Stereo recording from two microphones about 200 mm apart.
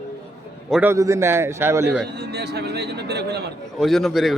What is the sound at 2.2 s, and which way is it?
Speech, 55° right (ahead or behind).